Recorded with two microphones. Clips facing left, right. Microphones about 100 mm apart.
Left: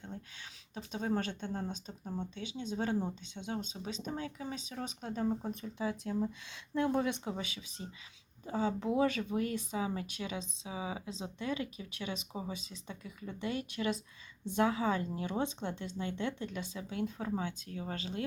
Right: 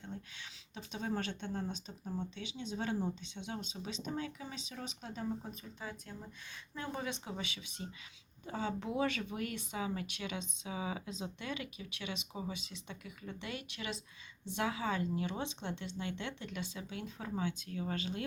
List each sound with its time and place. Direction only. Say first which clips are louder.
0.8 s speech: left 4 dB; 40° left (ahead or behind)
5.4 s speech: left 9 dB; 65° left (ahead or behind)
7.3 s speech: left 2 dB; 40° left (ahead or behind)